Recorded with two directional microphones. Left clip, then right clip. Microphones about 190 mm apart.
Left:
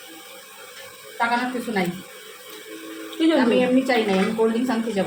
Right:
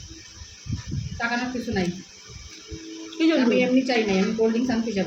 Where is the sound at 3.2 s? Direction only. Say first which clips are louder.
Left 2 dB; 20° right (ahead or behind).